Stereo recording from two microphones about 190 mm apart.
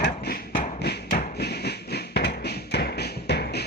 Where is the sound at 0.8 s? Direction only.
55° left (ahead or behind).